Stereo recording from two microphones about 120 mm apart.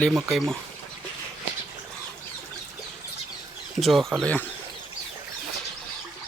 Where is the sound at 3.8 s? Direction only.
Centre (ahead or behind).